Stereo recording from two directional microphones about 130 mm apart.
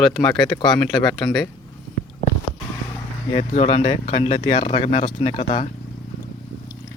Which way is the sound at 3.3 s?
50° left (ahead or behind).